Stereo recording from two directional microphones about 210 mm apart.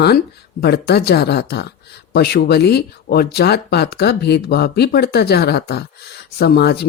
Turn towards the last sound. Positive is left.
turn(degrees=50)  # may be behind; listen again after turning